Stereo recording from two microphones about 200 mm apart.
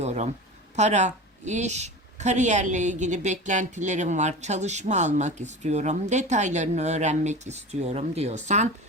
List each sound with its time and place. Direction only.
0.0 s a woman's voice: 35° right (ahead or behind)